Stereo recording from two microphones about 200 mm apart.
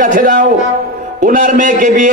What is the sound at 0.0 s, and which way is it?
A man's voice, 40° right (ahead or behind).